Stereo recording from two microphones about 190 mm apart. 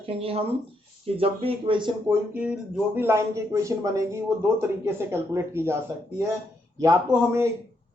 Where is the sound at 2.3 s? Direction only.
5° right (ahead or behind).